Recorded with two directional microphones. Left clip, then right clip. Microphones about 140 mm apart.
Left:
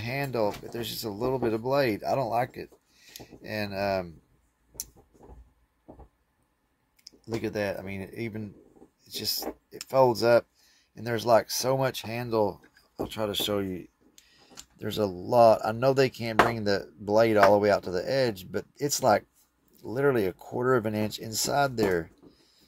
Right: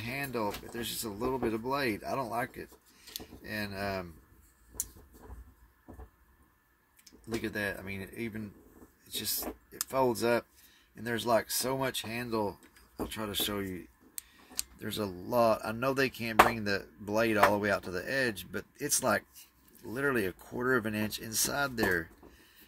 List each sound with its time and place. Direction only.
0.0 s speech: 50° left (ahead or behind)
7.1 s speech: 45° left (ahead or behind)